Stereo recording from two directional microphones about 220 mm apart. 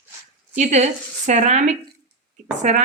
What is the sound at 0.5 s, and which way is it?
Speech, 30° right (ahead or behind).